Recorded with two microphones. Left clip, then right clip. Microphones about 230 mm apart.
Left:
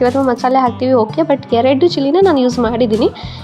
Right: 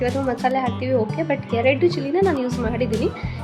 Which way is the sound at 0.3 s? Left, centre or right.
Left.